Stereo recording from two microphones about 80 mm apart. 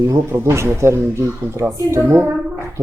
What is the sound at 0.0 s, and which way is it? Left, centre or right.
A woman's voice, right.